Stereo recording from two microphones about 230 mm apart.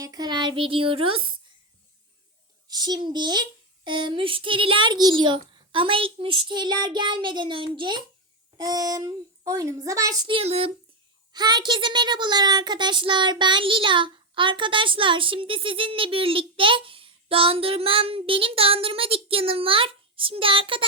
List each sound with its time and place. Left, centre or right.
0.0 s a child's voice: centre
2.6 s a child's voice: centre